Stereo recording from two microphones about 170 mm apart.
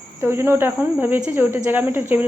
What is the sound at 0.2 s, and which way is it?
Speech, 15° right (ahead or behind).